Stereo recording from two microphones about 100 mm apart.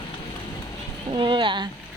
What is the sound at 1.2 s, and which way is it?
Speech, 55° right (ahead or behind).